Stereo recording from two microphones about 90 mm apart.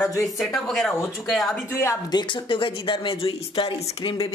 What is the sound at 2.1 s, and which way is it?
Speech, 55° left (ahead or behind).